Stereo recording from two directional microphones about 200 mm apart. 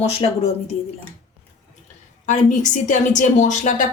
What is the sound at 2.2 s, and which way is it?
Speech, 40° left (ahead or behind).